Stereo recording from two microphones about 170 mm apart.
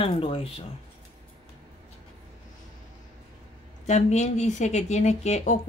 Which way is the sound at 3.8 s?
40° left (ahead or behind).